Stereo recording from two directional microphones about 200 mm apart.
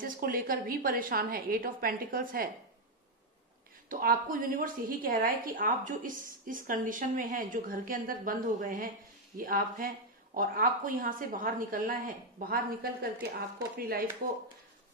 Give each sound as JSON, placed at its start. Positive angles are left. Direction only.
{"t": 0.0, "sound": "a woman's voice", "side_deg": -45}
{"t": 3.9, "sound": "a woman's voice", "side_deg": -45}